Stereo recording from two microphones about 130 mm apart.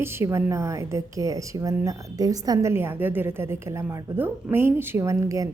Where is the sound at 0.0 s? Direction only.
20° right (ahead or behind).